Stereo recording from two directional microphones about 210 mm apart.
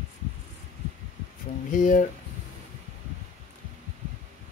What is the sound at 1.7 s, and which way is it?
Speech, 40° left (ahead or behind).